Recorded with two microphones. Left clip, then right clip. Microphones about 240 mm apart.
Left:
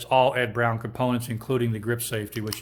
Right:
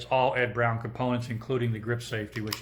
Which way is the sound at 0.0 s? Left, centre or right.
Left.